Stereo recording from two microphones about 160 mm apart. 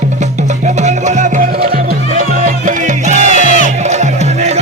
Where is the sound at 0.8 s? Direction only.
50° right (ahead or behind).